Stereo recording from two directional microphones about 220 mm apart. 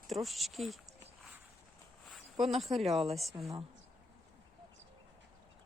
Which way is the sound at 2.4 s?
Centre (ahead or behind).